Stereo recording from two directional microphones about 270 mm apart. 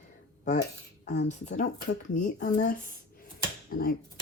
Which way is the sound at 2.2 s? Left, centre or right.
Left.